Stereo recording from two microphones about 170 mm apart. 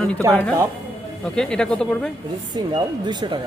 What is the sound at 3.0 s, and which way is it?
Speech, 25° right (ahead or behind).